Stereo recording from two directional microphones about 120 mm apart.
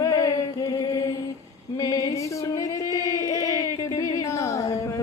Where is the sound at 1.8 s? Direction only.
30° left (ahead or behind).